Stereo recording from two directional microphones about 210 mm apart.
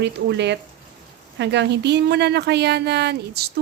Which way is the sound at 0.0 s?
55° right (ahead or behind).